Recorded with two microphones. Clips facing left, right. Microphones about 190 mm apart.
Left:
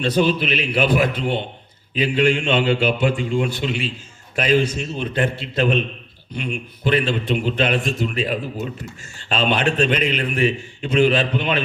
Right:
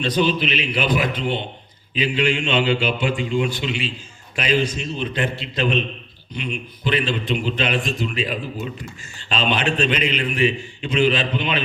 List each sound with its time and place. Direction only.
0.0 s a man's voice: 45° left (ahead or behind)